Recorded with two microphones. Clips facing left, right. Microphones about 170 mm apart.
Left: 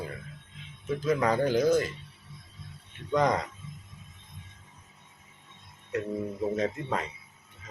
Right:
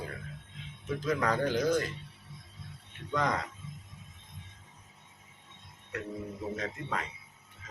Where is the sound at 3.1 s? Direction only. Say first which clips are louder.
Left 6 dB; 20° left (ahead or behind).